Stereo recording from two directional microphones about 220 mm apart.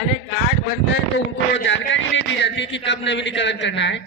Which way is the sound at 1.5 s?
55° left (ahead or behind).